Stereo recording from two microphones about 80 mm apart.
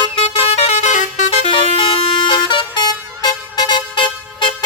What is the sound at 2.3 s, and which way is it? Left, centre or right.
Vehicle, left.